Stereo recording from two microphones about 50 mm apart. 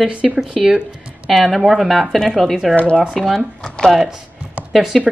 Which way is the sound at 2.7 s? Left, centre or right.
Left.